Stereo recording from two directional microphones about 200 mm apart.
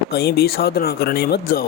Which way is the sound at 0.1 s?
55° left (ahead or behind).